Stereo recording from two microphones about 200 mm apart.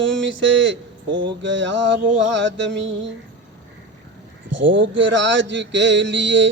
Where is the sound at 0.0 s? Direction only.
65° right (ahead or behind).